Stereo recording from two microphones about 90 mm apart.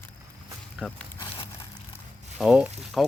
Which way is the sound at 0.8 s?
10° right (ahead or behind).